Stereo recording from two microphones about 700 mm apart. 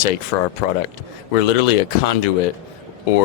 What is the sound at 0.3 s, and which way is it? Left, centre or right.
Speech, left.